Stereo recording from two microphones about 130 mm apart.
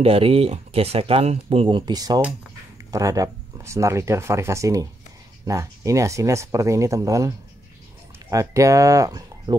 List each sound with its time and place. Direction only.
0.0 s speech: 45° right (ahead or behind); by 9.6 s 25° right (ahead or behind)